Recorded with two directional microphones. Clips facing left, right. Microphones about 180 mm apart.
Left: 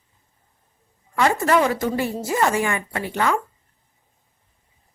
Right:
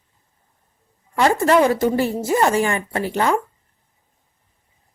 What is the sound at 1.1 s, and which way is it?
A woman's voice, 30° right (ahead or behind).